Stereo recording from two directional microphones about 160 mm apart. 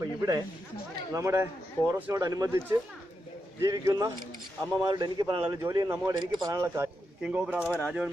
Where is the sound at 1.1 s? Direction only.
15° right (ahead or behind).